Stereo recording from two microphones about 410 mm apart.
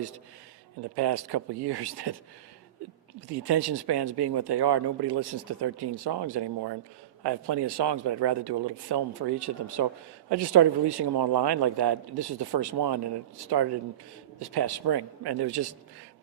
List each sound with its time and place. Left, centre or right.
0.9 s speech: right
3.2 s speech: right